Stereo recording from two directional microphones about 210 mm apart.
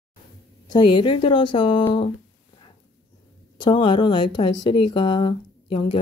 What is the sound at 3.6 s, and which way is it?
Speech, 20° left (ahead or behind).